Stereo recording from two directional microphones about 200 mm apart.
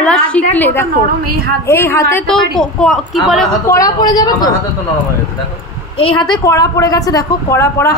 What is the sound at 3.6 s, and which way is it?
Speech, 15° left (ahead or behind).